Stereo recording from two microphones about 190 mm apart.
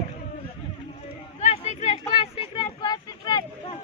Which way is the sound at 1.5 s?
30° left (ahead or behind).